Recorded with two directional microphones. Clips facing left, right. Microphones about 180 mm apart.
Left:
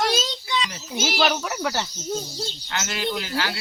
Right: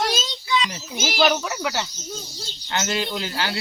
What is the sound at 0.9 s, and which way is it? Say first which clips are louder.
Speech: right 2 dB; 5° right (ahead or behind).